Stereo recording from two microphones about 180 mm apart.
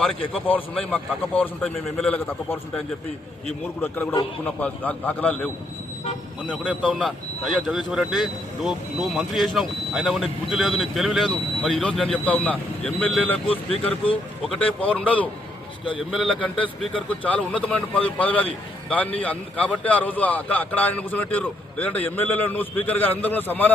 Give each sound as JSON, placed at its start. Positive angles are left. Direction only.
{"t": 0.4, "sound": "a man's voice", "side_deg": 5}
{"t": 6.8, "sound": "a man's voice", "side_deg": 0}